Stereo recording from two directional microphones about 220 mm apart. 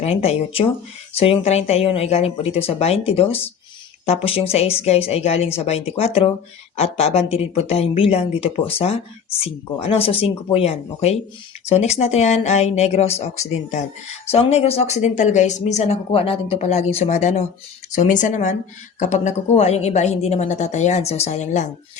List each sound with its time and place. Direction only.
0.0 s a woman's voice: 30° left (ahead or behind)